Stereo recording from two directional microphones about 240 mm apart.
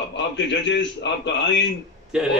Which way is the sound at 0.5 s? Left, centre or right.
Left.